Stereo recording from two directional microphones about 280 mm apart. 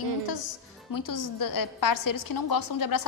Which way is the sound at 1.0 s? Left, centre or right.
Left.